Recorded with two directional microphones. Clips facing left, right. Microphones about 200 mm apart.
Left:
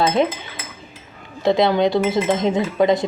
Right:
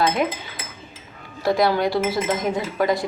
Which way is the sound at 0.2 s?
25° left (ahead or behind).